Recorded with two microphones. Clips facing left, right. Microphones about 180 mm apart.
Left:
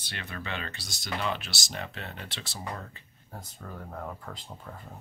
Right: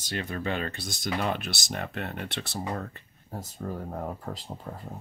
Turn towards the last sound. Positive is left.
turn(degrees=-30)  # may be behind; listen again after turning